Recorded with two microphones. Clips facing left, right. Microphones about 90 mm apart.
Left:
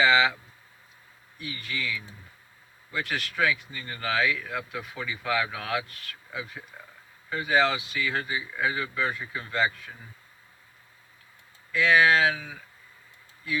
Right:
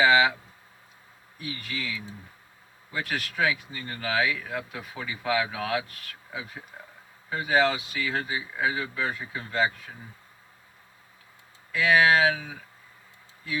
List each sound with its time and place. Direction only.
0.0 s speech: 10° right (ahead or behind)
1.4 s speech: 15° right (ahead or behind)
3.1 s speech: 15° right (ahead or behind)
7.3 s speech: 15° right (ahead or behind)
11.7 s speech: 10° right (ahead or behind)